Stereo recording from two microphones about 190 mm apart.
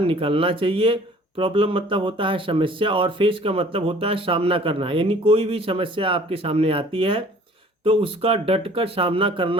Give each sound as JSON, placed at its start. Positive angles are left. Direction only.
{"t": 0.0, "sound": "speech", "side_deg": -30}